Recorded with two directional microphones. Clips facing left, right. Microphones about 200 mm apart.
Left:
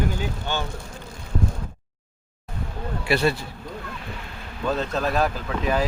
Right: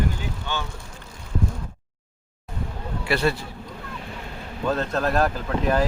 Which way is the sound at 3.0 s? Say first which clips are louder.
Left 1 dB; 15° left (ahead or behind).